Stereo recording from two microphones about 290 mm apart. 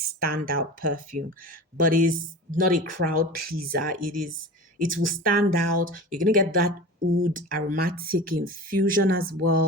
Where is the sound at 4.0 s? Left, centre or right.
Right.